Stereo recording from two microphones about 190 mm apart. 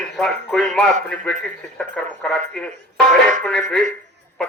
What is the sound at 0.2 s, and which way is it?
A man's voice, 5° left (ahead or behind).